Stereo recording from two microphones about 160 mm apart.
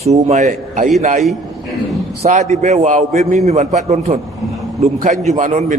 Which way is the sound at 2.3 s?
50° right (ahead or behind).